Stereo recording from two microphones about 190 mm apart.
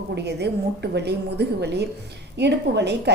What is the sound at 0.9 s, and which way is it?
A woman's voice, 60° right (ahead or behind).